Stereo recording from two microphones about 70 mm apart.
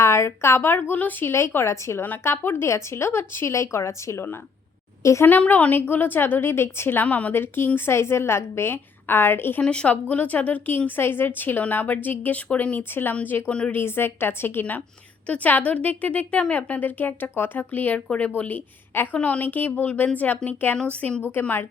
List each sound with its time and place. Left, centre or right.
0.0 s speech: left
1.3 s speech: left
5.0 s a woman's voice: left
5.4 s a woman's voice: centre; by 7.0 s left
7.0 s a woman's voice: left
7.3 s speech: left
9.6 s a woman's voice: centre
13.5 s speech: centre
13.7 s a woman's voice: left